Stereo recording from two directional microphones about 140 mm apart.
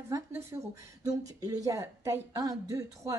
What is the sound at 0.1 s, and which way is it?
Speech, 20° right (ahead or behind).